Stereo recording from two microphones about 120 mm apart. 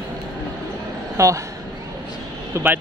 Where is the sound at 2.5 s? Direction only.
15° right (ahead or behind).